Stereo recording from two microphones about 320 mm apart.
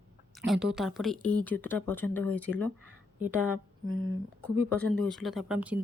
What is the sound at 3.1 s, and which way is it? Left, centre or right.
Speech, centre.